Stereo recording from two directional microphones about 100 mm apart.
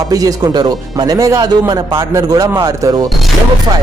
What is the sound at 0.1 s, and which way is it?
A man's voice, 35° right (ahead or behind).